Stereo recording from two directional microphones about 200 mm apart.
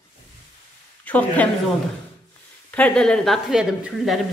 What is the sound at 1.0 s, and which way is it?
Speech, 5° left (ahead or behind).